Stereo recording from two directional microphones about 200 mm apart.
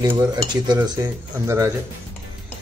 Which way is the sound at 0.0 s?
15° right (ahead or behind).